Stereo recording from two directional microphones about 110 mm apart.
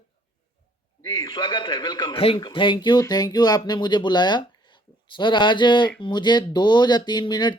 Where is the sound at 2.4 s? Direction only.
45° left (ahead or behind).